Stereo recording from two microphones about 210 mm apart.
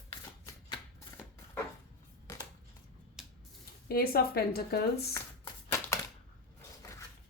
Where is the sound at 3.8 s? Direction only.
45° left (ahead or behind).